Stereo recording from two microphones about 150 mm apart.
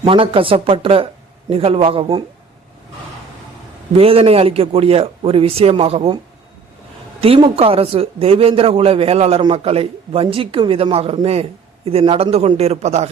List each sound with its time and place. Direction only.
0.0 s a man's voice: 35° right (ahead or behind)
3.9 s a man's voice: 40° right (ahead or behind)
7.2 s a man's voice: 35° right (ahead or behind)